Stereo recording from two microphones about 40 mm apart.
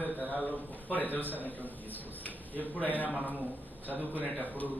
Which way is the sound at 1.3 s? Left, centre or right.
Right.